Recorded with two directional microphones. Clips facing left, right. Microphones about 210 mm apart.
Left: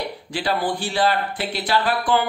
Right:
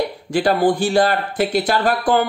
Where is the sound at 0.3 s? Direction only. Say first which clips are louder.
Right 8 dB; 45° right (ahead or behind).